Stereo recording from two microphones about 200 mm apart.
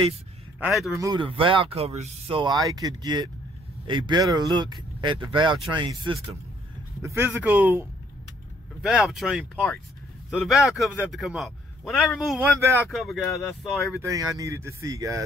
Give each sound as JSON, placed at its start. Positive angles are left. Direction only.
{"t": 0.9, "sound": "speech", "side_deg": -20}
{"t": 7.0, "sound": "speech", "side_deg": -15}
{"t": 8.8, "sound": "a man's voice", "side_deg": 0}
{"t": 12.5, "sound": "speech", "side_deg": -15}
{"t": 12.9, "sound": "a man's voice", "side_deg": 0}
{"t": 14.0, "sound": "speech", "side_deg": -15}